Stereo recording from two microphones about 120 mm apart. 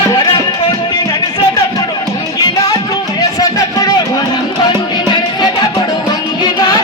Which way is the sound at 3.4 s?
30° left (ahead or behind).